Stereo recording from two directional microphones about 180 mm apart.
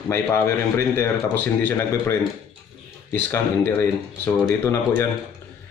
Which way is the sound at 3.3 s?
15° left (ahead or behind).